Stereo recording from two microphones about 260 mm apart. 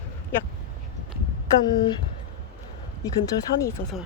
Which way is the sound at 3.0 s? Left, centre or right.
Centre.